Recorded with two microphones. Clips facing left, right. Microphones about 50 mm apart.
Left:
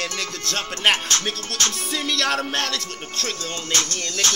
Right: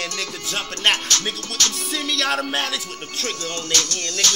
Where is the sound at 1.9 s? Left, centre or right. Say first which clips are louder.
Even; centre.